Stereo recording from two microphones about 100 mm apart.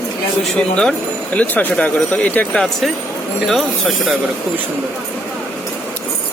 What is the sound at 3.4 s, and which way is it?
Speech, centre (ahead or behind).